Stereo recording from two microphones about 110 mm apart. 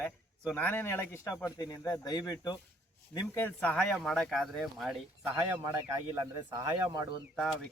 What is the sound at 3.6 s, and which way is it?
Speech, 10° left (ahead or behind).